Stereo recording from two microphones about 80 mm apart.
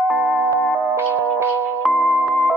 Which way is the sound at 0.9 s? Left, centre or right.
Right.